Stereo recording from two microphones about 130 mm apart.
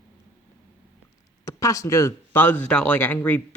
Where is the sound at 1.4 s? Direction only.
25° left (ahead or behind).